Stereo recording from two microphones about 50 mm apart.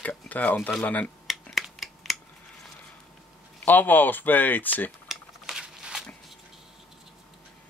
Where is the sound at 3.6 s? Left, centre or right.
Left.